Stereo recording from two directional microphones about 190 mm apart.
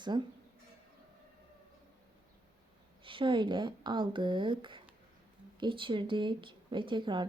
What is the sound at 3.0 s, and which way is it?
Speech, 25° right (ahead or behind).